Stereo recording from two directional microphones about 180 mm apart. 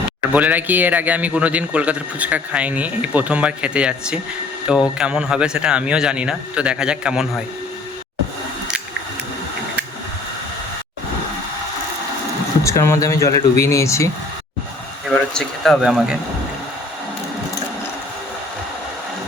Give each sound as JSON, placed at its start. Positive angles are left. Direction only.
{"t": 0.3, "sound": "a man's voice", "side_deg": -10}
{"t": 12.6, "sound": "speech", "side_deg": 15}
{"t": 15.0, "sound": "speech", "side_deg": 5}